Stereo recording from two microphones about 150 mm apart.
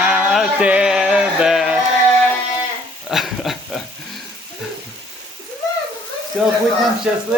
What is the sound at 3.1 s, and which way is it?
Dog, centre (ahead or behind).